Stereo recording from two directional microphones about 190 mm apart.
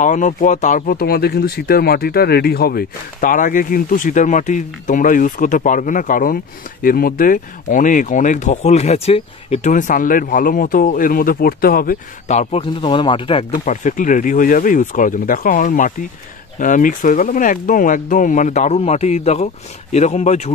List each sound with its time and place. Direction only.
0.0 s speech: 40° left (ahead or behind)
13.5 s speech: 40° left (ahead or behind)